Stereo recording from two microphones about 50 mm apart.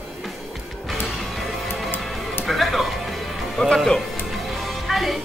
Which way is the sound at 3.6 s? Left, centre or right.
Left.